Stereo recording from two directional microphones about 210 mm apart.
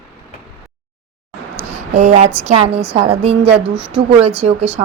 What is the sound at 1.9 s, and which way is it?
Speech, 30° right (ahead or behind).